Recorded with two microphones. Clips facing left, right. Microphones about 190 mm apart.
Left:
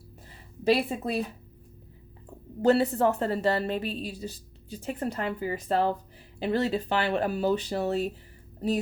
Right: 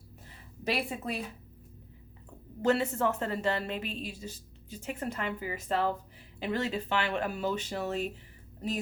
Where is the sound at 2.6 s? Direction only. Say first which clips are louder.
Left 5 dB; 35° left (ahead or behind).